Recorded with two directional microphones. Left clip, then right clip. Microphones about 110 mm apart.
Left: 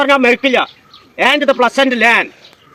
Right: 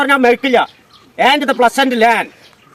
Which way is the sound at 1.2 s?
40° right (ahead or behind).